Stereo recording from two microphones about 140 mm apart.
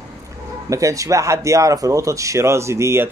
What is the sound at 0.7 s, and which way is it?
Speech, 25° right (ahead or behind).